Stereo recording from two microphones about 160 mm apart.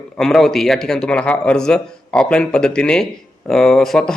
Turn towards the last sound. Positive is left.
turn(degrees=5)  # may be behind; listen again after turning